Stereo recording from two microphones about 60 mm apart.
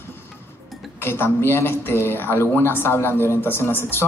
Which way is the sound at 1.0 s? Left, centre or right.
Left.